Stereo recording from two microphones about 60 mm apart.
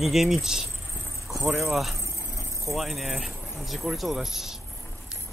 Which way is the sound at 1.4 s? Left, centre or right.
Right.